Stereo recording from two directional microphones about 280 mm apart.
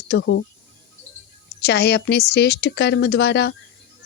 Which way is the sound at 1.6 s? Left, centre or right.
Left.